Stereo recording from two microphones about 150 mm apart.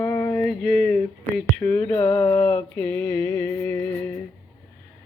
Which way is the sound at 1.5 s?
10° left (ahead or behind).